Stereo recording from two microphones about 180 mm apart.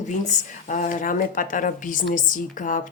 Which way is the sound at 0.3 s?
45° left (ahead or behind).